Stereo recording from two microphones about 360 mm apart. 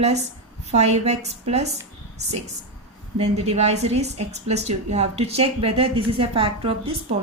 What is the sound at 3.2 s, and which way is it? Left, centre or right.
A woman's voice, centre.